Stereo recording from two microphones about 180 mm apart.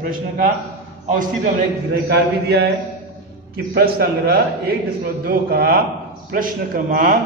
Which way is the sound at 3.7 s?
60° right (ahead or behind).